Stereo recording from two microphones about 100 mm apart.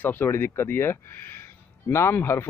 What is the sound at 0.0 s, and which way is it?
A man's voice, 20° left (ahead or behind).